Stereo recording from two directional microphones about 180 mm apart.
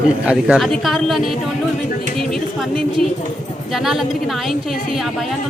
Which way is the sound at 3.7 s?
Centre (ahead or behind).